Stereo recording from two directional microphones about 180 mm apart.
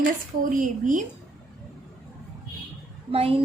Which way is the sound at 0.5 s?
45° right (ahead or behind).